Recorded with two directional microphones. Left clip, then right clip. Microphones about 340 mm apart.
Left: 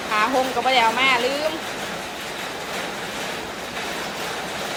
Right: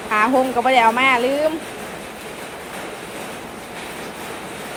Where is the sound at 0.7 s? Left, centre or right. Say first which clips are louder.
Right 3 dB; centre.